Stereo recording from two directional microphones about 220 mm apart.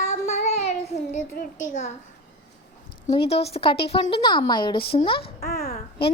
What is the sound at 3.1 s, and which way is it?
Speech, 25° left (ahead or behind).